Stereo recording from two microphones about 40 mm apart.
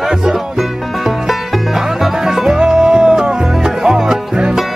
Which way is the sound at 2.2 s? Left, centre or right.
Centre.